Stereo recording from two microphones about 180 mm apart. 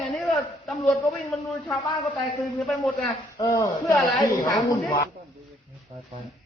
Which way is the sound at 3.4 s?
20° left (ahead or behind).